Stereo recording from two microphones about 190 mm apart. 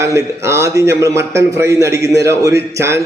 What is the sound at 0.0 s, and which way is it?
A man's voice, 15° right (ahead or behind).